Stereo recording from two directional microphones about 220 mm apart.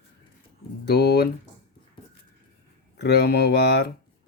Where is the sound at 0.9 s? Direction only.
50° left (ahead or behind).